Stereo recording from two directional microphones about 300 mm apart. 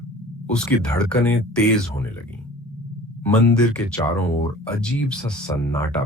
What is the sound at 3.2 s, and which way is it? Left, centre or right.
Speech, centre.